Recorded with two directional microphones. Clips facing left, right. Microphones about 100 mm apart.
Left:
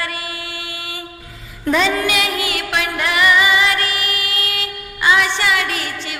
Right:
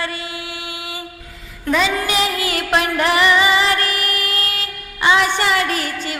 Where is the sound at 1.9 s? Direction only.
30° right (ahead or behind).